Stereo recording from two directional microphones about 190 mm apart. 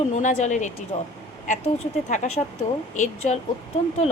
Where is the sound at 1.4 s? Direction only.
40° left (ahead or behind).